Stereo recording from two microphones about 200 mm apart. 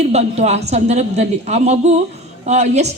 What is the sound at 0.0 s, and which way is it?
A man's voice, 30° right (ahead or behind).